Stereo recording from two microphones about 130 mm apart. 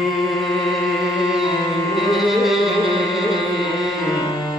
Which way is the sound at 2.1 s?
Centre (ahead or behind).